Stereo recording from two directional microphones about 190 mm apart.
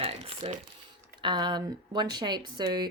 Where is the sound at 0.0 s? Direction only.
30° right (ahead or behind).